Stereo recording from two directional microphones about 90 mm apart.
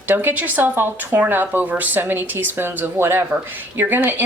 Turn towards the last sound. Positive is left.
turn(degrees=-25)  # may be behind; listen again after turning